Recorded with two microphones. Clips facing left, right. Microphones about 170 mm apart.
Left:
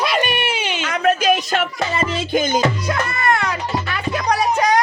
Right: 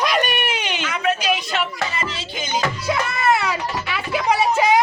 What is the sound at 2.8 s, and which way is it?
Music, 5° right (ahead or behind).